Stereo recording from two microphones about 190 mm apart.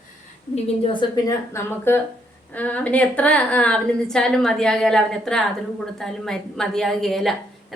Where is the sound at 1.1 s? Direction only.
15° left (ahead or behind).